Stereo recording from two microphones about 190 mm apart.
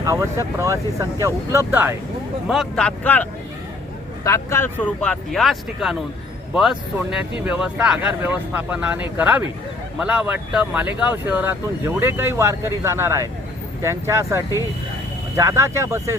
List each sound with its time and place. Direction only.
0.0 s speech: 15° right (ahead or behind)
2.5 s speech: centre (ahead or behind); by 16.1 s 15° right (ahead or behind)